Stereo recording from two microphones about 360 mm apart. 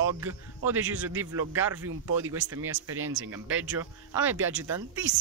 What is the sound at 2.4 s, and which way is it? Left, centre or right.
Speech, right.